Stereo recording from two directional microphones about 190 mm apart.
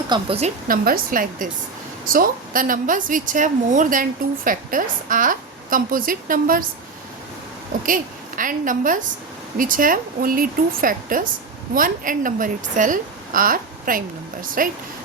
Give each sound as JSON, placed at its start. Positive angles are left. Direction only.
{"t": 0.1, "sound": "a woman's voice", "side_deg": -30}
{"t": 0.7, "sound": "a woman's voice", "side_deg": -50}
{"t": 7.9, "sound": "a woman's voice", "side_deg": -45}